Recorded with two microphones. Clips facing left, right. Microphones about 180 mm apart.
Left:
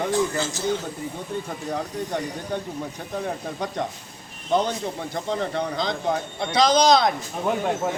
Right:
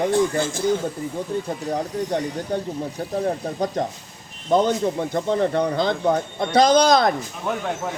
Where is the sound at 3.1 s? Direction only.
40° right (ahead or behind).